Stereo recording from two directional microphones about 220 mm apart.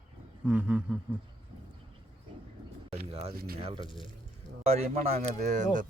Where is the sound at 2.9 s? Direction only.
30° right (ahead or behind).